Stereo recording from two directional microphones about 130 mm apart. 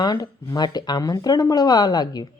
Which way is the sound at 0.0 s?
30° left (ahead or behind).